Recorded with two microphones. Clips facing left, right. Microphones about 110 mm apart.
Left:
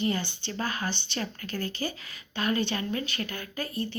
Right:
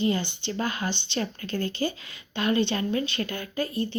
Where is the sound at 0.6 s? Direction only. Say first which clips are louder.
Right 2 dB; 40° left (ahead or behind).